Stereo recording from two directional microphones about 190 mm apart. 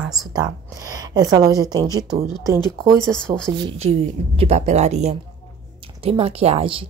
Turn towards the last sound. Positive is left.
turn(degrees=-30)  # may be behind; listen again after turning